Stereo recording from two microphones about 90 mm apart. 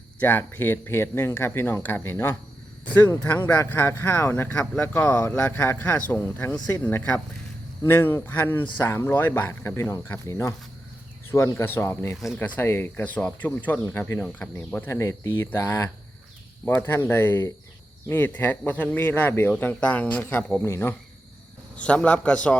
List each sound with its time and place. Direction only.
0.2 s speech: 20° left (ahead or behind)
10.2 s speech: 35° left (ahead or behind)
21.8 s a man's voice: 15° left (ahead or behind)